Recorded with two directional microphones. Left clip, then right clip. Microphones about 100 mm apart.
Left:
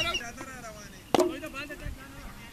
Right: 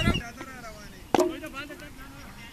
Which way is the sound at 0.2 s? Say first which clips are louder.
Even; 20° left (ahead or behind).